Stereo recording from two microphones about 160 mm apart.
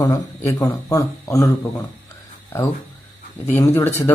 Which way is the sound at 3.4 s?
15° left (ahead or behind).